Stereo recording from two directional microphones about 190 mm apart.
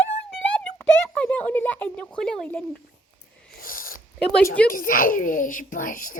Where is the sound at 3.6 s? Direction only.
50° left (ahead or behind).